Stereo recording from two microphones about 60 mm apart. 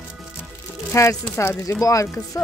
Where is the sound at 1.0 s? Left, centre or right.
Left.